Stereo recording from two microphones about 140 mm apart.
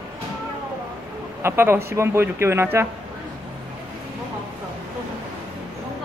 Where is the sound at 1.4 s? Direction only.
15° right (ahead or behind).